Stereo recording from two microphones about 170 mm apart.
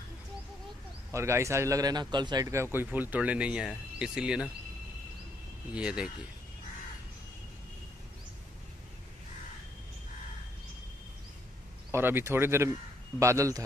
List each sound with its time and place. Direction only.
1.1 s speech: 15° right (ahead or behind)
5.8 s speech: 5° right (ahead or behind)
11.9 s speech: 10° right (ahead or behind)